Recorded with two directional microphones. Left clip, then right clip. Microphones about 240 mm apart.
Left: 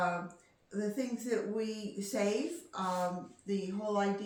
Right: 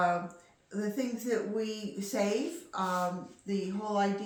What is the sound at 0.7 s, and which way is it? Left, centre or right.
Speech, centre.